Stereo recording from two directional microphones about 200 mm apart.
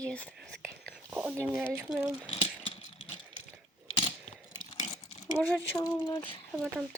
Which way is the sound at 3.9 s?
25° left (ahead or behind).